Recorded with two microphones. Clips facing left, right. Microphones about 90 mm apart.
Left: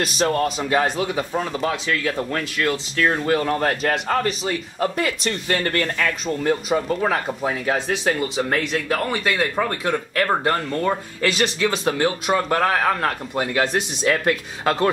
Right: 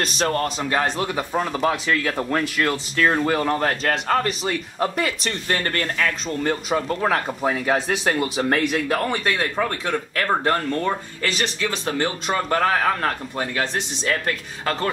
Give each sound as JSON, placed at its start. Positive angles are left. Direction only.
{"t": 0.0, "sound": "speech", "side_deg": 5}
{"t": 2.7, "sound": "speech", "side_deg": -5}
{"t": 11.3, "sound": "speech", "side_deg": 15}
{"t": 11.9, "sound": "speech", "side_deg": 5}